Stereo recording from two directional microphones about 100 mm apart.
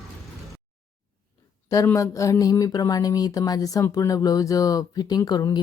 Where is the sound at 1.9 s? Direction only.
30° left (ahead or behind).